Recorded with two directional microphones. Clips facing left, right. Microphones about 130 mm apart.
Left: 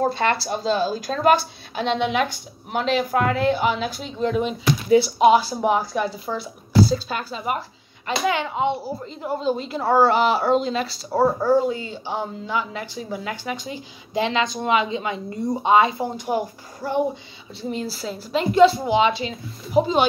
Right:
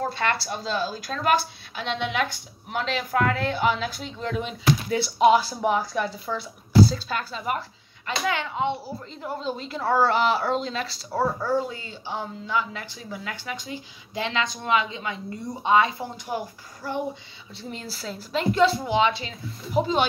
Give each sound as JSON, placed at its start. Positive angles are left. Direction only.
{"t": 0.0, "sound": "speech", "side_deg": 25}
{"t": 4.9, "sound": "speech", "side_deg": 5}
{"t": 11.7, "sound": "speech", "side_deg": 20}